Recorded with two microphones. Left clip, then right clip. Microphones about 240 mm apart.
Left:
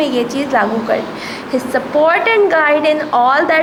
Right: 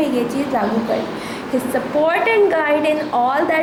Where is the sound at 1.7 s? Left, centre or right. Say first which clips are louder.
Left 5 dB; centre.